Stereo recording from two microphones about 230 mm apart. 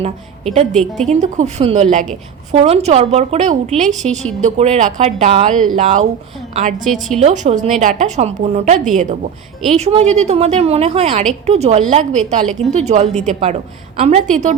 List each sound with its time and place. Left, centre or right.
0.7 s a woman's voice: centre
1.1 s a woman's voice: right